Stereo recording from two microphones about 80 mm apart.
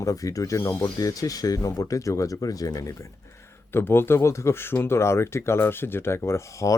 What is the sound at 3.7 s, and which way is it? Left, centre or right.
Speech, left.